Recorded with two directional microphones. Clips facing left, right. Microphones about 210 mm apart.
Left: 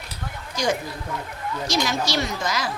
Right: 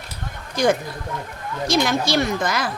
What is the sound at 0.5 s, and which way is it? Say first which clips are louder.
A woman's voice: right 5 dB; 55° right (ahead or behind).